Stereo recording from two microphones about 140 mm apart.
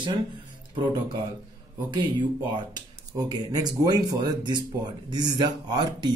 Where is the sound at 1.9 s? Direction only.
35° right (ahead or behind).